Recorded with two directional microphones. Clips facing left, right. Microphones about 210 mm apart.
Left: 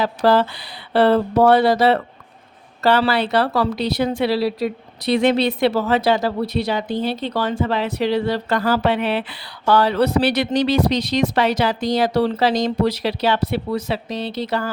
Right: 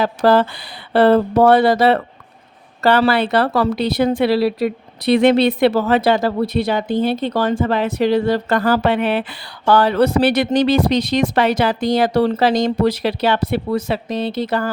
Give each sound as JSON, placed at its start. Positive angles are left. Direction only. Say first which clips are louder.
{"t": 0.0, "sound": "a woman's voice", "louder": "right 2 dB", "side_deg": -50}